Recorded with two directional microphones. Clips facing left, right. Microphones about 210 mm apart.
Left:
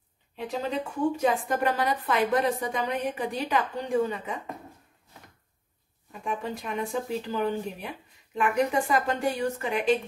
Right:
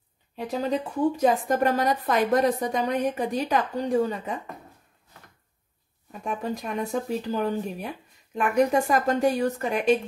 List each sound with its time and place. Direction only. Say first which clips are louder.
0.4 s a woman's voice: right 3 dB; 40° right (ahead or behind)
6.2 s a woman's voice: right 2 dB; 40° right (ahead or behind)